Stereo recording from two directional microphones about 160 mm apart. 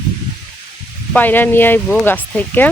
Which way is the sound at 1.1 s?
10° left (ahead or behind).